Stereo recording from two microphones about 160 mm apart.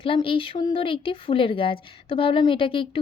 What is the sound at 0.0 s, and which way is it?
A woman's voice, 35° left (ahead or behind).